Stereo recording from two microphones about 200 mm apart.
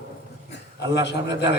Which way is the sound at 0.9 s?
60° left (ahead or behind).